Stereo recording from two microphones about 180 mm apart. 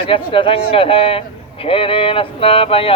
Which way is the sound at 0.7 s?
30° left (ahead or behind).